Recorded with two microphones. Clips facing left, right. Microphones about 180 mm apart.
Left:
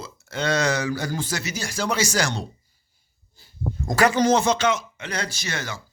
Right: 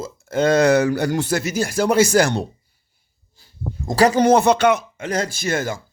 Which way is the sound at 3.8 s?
35° right (ahead or behind).